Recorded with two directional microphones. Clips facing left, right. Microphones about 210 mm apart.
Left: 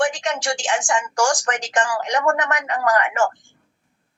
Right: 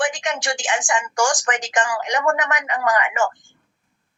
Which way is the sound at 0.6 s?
15° right (ahead or behind).